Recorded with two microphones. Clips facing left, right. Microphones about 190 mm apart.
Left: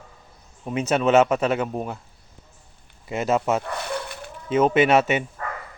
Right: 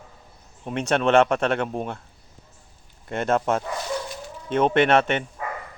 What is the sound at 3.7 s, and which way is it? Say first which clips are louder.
Dog: right 1 dB; 60° left (ahead or behind).